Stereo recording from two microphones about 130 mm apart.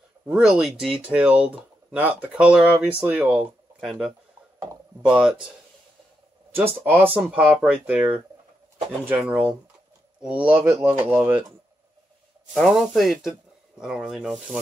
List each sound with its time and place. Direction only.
0.3 s speech: 5° right (ahead or behind)
6.5 s speech: 15° right (ahead or behind)
7.2 s speech: 5° right (ahead or behind)
12.5 s speech: centre (ahead or behind)